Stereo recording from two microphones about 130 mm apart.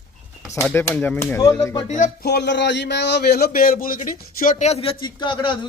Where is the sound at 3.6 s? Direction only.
90° left; by 5.6 s 40° left (ahead or behind).